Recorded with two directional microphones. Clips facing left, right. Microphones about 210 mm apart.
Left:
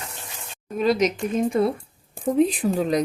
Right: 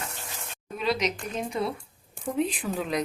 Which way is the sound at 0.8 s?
45° left (ahead or behind).